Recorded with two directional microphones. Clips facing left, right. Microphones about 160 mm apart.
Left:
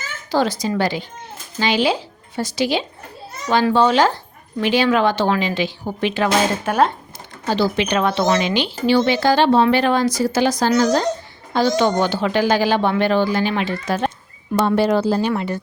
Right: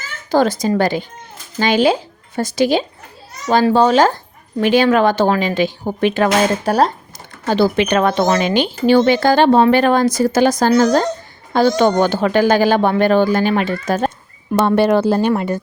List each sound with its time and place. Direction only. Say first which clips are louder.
0.3 s speech: right 5 dB; 50° right (ahead or behind)
6.7 s speech: right 1 dB; 35° right (ahead or behind)
7.4 s speech: right 4 dB; 55° right (ahead or behind)
14.8 s speech: right 4 dB; 60° right (ahead or behind)